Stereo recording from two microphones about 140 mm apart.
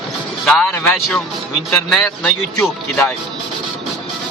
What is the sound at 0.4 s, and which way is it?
Speech, 10° left (ahead or behind).